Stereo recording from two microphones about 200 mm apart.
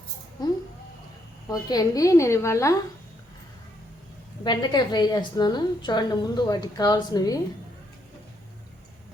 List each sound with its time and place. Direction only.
1.5 s a woman's voice: 15° left (ahead or behind)
4.4 s a woman's voice: 20° left (ahead or behind)